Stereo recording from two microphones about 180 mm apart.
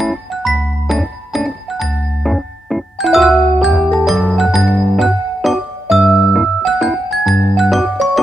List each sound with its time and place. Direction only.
0.0 s music: centre (ahead or behind)